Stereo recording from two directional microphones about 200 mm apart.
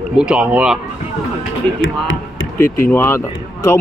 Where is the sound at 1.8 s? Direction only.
75° left (ahead or behind).